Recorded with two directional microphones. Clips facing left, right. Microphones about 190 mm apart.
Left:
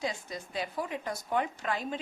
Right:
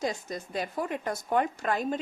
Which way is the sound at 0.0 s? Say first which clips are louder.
Right 4 dB; 45° right (ahead or behind).